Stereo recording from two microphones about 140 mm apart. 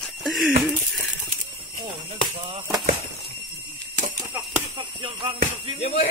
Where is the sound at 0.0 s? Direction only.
Centre (ahead or behind).